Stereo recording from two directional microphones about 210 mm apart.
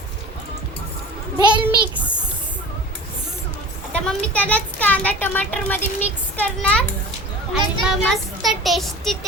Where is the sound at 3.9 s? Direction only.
5° left (ahead or behind).